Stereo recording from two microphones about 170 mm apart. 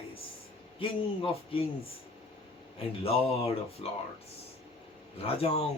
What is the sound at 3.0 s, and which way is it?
Speech, 35° left (ahead or behind).